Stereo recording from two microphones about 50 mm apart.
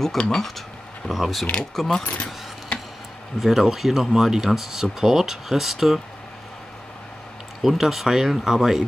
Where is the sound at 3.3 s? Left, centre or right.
Centre.